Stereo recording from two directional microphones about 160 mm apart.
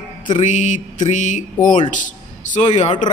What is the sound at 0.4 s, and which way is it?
A man's voice, 50° left (ahead or behind).